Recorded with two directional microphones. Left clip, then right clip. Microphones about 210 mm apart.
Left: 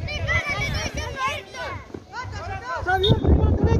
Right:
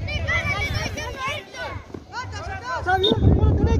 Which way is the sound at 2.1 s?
50° right (ahead or behind).